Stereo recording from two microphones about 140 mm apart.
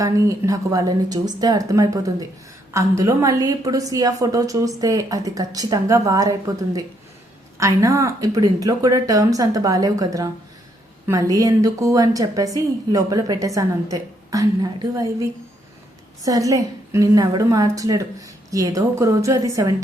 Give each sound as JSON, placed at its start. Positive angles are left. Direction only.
{"t": 0.0, "sound": "a woman's voice", "side_deg": -25}
{"t": 7.6, "sound": "a woman's voice", "side_deg": -20}